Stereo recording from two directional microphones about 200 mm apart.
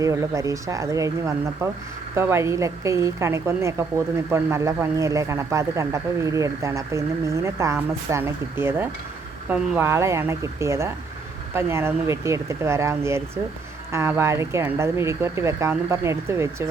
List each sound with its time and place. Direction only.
0.0 s a woman's voice: 15° right (ahead or behind)